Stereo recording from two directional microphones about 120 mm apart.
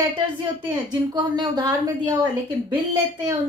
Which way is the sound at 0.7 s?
35° right (ahead or behind).